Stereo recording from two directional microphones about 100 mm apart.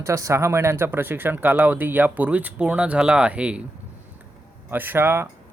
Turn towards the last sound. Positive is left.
turn(degrees=-25)  # may be behind; listen again after turning